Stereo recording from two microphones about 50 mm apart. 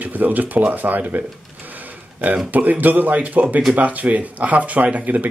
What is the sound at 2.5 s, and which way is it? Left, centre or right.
Speech, right.